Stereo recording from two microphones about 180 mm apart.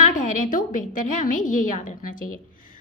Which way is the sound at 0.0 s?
45° left (ahead or behind).